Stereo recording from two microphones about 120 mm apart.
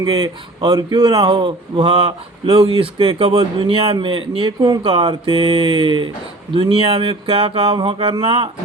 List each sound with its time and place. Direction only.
0.0 s speech: 40° right (ahead or behind)